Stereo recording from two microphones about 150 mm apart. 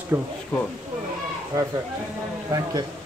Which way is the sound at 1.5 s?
25° right (ahead or behind).